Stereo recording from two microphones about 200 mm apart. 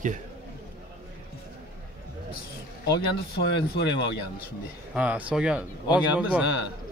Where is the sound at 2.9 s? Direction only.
55° left (ahead or behind).